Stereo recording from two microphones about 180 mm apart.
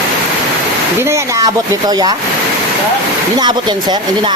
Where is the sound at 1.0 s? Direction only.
15° right (ahead or behind).